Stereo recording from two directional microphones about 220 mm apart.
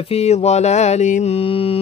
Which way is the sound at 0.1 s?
30° left (ahead or behind).